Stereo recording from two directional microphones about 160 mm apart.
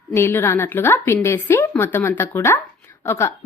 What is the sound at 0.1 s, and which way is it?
Speech, 15° left (ahead or behind).